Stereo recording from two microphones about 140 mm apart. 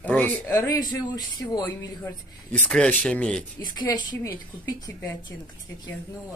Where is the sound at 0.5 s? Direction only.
30° left (ahead or behind).